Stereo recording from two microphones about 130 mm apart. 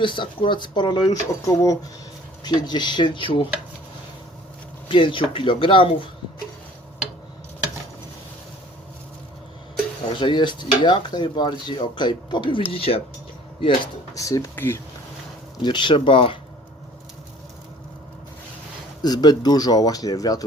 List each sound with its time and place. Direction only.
0.0 s speech: 40° left (ahead or behind)
4.9 s speech: 40° left (ahead or behind)
10.1 s speech: 35° left (ahead or behind)
14.1 s speech: 25° left (ahead or behind)
15.6 s speech: 35° left (ahead or behind)
19.0 s speech: 30° left (ahead or behind)